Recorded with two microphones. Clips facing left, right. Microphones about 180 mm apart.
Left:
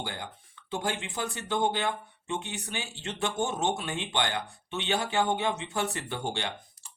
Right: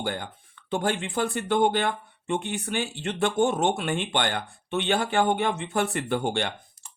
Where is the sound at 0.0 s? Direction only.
55° right (ahead or behind).